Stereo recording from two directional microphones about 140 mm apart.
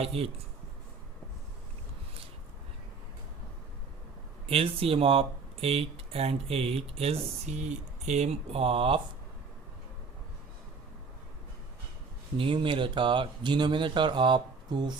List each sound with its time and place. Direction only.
0.0 s speech: 45° right (ahead or behind)
4.4 s speech: 40° right (ahead or behind)
12.4 s speech: 40° right (ahead or behind)